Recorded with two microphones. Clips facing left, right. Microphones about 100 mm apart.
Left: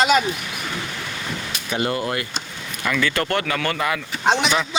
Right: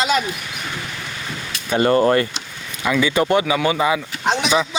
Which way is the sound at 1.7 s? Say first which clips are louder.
Right 9 dB; 40° right (ahead or behind).